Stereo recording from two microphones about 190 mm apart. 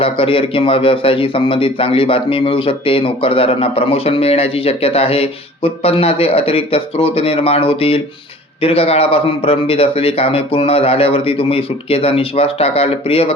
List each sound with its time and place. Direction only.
0.0 s speech: 30° left (ahead or behind)